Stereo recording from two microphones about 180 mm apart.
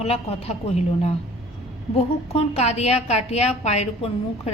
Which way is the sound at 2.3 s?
35° left (ahead or behind).